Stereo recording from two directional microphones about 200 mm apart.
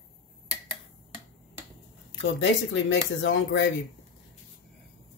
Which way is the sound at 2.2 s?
70° left (ahead or behind).